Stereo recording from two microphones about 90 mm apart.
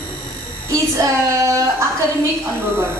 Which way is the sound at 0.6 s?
35° right (ahead or behind).